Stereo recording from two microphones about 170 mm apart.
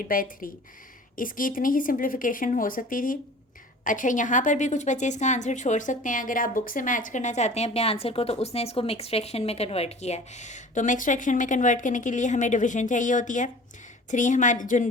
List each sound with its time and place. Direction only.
0.0 s a woman's voice: 55° left (ahead or behind)